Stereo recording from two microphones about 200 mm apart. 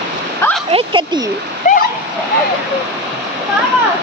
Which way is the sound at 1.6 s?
40° left (ahead or behind).